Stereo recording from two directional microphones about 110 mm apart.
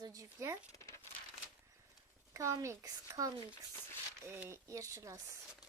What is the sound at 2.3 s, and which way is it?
Speech, 30° right (ahead or behind).